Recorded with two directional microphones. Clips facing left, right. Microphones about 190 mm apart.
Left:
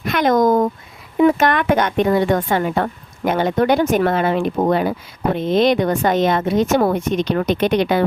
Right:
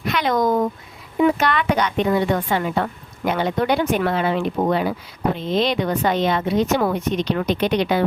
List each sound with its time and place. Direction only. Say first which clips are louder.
0.0 s speech: left 5 dB; 50° left (ahead or behind)